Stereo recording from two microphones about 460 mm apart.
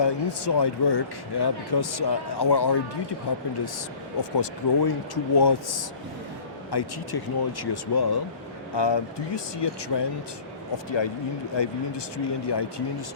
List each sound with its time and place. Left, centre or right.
0.0 s speech: left
4.2 s speech: left